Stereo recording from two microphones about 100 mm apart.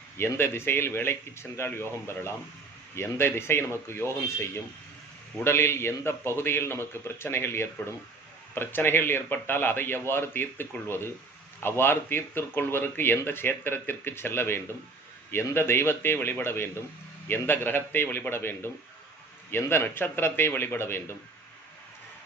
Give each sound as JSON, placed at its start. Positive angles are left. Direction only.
{"t": 0.2, "sound": "speech", "side_deg": 25}
{"t": 5.4, "sound": "speech", "side_deg": 25}